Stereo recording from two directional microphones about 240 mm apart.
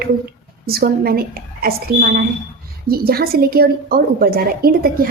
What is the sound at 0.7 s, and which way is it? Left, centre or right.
A woman's voice, right.